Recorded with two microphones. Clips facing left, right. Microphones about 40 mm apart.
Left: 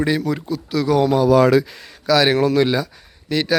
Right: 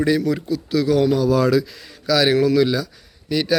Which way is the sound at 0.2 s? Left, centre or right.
Centre.